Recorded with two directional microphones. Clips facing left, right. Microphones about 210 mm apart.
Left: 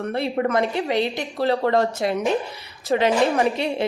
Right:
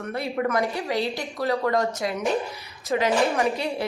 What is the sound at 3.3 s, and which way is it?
Speech, 20° left (ahead or behind).